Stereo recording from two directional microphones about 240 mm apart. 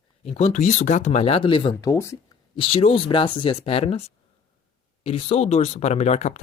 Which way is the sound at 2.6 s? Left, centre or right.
Left.